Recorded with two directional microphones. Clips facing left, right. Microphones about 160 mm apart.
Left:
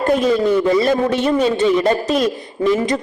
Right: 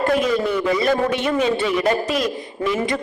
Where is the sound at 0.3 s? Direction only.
30° left (ahead or behind).